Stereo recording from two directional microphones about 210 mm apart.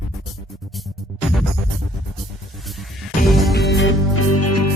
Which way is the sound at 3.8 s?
75° left (ahead or behind).